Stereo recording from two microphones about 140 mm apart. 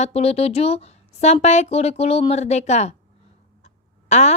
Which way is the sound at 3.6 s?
55° left (ahead or behind).